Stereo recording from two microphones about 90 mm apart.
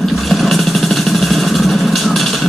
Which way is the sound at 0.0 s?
Centre (ahead or behind).